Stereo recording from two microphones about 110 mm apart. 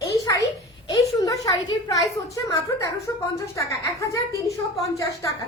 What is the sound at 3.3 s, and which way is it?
A woman's voice, 30° left (ahead or behind).